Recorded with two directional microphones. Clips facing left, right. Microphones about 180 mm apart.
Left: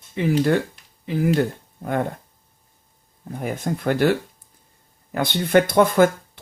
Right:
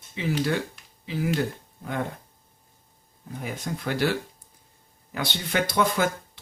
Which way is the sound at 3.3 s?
50° left (ahead or behind).